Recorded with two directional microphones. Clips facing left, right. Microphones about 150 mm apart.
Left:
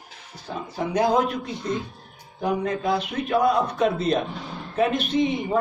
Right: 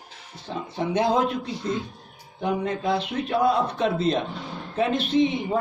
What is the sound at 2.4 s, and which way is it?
A man's voice, 25° right (ahead or behind).